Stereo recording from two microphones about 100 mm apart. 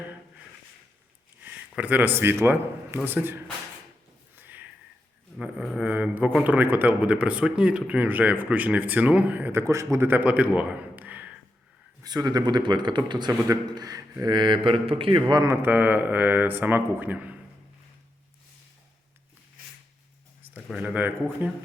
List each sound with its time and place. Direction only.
1.4 s a man's voice: 15° right (ahead or behind)
4.4 s a sound: 20° right (ahead or behind)
5.8 s a sound: 15° right (ahead or behind)
6.4 s speech: 15° right (ahead or behind)
12.0 s a man's voice: 40° right (ahead or behind); by 15.2 s 65° right (ahead or behind)
15.4 s speech: 20° right (ahead or behind)
20.7 s speech: 15° right (ahead or behind)